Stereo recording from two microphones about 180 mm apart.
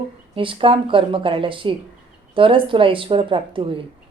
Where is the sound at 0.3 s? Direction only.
30° right (ahead or behind).